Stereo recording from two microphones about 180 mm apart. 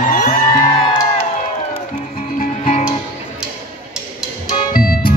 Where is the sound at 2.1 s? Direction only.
45° left (ahead or behind).